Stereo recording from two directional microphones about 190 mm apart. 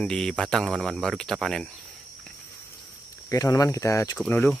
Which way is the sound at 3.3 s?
20° left (ahead or behind).